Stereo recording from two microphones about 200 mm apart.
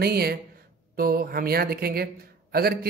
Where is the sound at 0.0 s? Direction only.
50° right (ahead or behind).